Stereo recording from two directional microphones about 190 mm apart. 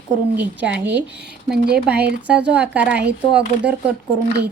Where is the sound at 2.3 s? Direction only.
5° right (ahead or behind).